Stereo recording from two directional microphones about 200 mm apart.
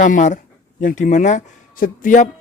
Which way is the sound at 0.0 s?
40° left (ahead or behind).